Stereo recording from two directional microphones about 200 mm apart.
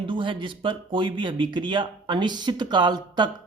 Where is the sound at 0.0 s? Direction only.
25° right (ahead or behind).